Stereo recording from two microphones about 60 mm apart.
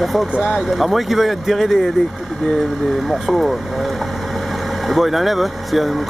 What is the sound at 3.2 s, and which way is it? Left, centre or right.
Speech, centre.